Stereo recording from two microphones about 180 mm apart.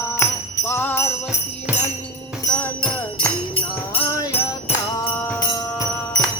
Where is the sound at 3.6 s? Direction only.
25° left (ahead or behind).